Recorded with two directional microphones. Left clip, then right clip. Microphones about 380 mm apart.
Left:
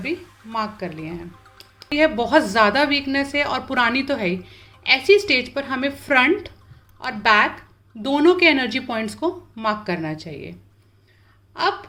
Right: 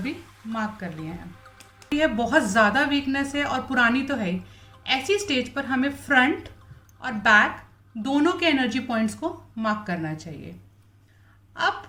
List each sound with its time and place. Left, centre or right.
1.5 s a woman's voice: centre